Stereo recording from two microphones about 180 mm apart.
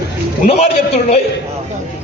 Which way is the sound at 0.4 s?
35° left (ahead or behind).